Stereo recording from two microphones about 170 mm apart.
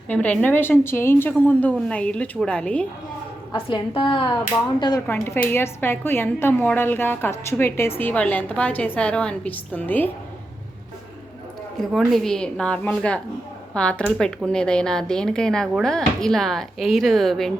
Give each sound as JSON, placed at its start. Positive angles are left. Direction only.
{"t": 0.1, "sound": "a woman's voice", "side_deg": 10}
{"t": 3.5, "sound": "a woman's voice", "side_deg": 30}
{"t": 5.0, "sound": "a woman's voice", "side_deg": 15}
{"t": 11.8, "sound": "speech", "side_deg": 0}